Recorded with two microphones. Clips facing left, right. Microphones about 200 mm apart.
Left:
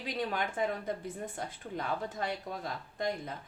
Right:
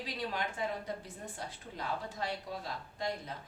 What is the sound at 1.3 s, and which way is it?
Speech, 50° left (ahead or behind).